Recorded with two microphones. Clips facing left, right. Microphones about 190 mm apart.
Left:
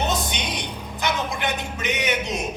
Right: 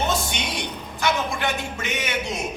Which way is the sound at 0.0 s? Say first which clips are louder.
Even; 20° left (ahead or behind).